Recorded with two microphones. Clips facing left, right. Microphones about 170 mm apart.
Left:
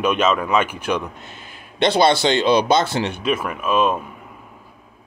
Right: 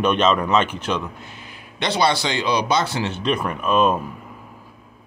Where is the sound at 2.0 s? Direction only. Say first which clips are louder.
Left 4 dB; 25° left (ahead or behind).